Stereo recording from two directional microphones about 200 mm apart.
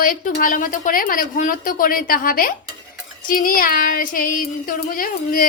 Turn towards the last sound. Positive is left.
turn(degrees=45)  # may be behind; listen again after turning